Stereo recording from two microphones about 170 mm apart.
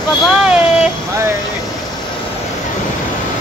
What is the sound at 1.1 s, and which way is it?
Speech, 15° right (ahead or behind).